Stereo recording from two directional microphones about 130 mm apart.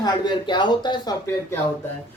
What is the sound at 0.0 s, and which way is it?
A woman's voice, 35° left (ahead or behind).